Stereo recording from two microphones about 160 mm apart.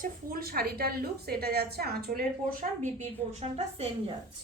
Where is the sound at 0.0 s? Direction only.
65° right (ahead or behind).